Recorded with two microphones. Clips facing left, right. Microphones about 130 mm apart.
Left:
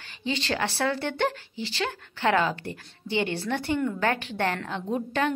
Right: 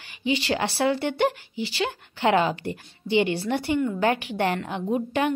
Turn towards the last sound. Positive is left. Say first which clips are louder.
# right 3 dB
turn(degrees=-10)  # may be behind; listen again after turning